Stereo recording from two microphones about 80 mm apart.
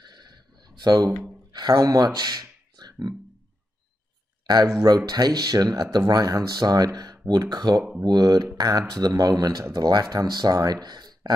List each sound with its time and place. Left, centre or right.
0.0 s a sound: right
1.7 s speech: right
4.6 s speech: right